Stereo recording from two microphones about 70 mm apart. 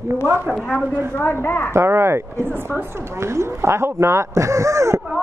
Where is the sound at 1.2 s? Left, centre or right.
Left.